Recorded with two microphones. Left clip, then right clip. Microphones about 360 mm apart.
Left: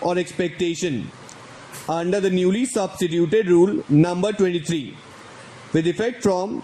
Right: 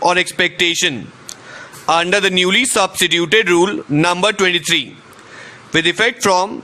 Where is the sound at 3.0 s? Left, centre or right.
Right.